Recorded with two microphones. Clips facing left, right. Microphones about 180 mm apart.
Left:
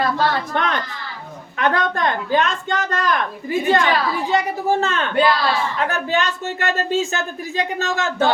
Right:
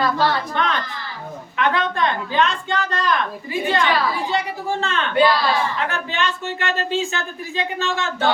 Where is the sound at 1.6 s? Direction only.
45° left (ahead or behind).